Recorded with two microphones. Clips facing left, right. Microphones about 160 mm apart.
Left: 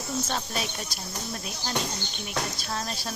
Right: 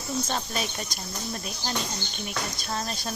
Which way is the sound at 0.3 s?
5° left (ahead or behind).